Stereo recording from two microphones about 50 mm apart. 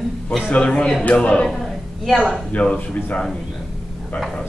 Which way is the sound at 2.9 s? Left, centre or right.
Left.